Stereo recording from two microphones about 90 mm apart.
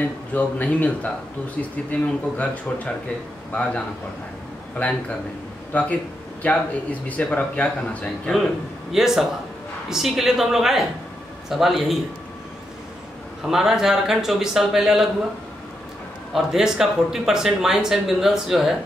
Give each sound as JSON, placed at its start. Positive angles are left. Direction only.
{"t": 0.3, "sound": "a man's voice", "side_deg": 15}
{"t": 4.8, "sound": "a man's voice", "side_deg": 20}
{"t": 8.9, "sound": "speech", "side_deg": -5}
{"t": 13.5, "sound": "speech", "side_deg": -5}
{"t": 16.3, "sound": "speech", "side_deg": -5}